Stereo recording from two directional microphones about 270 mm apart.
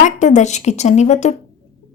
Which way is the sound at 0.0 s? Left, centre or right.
Left.